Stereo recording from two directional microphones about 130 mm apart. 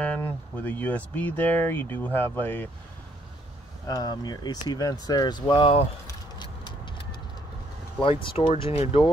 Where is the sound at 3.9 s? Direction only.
30° left (ahead or behind).